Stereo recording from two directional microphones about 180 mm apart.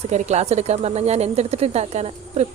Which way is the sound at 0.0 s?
40° right (ahead or behind).